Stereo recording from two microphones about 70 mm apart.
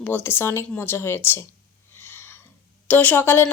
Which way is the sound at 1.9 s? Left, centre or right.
Left.